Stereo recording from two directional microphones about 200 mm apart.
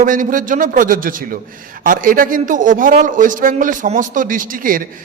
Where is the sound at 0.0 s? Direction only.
40° right (ahead or behind).